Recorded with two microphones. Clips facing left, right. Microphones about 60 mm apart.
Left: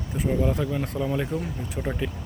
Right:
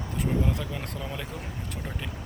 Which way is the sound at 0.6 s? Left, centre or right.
Left.